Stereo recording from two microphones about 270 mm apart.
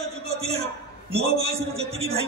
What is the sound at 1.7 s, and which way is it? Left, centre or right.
Speech, right.